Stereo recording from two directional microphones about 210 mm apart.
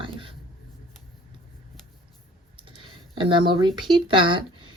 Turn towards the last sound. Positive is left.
turn(degrees=-25)  # may be behind; listen again after turning